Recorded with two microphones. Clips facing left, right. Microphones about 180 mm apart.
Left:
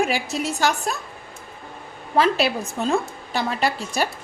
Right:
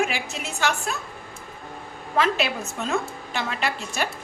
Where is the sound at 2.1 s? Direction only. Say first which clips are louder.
Left 4 dB; 35° left (ahead or behind).